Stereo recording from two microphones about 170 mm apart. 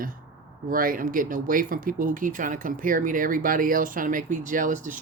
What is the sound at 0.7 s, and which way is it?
Speech, 55° right (ahead or behind).